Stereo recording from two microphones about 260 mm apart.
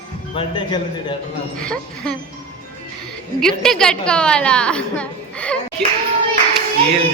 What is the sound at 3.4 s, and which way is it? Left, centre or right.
A woman's voice, centre.